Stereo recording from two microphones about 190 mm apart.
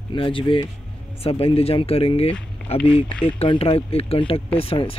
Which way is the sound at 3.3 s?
30° left (ahead or behind).